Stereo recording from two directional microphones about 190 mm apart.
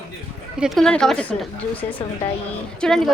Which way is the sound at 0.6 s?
Centre (ahead or behind).